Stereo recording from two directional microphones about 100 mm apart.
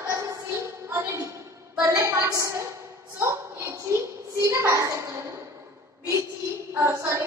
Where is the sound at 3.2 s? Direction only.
25° right (ahead or behind).